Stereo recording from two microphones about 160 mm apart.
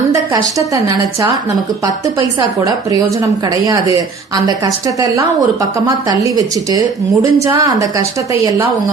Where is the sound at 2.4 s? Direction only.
25° right (ahead or behind).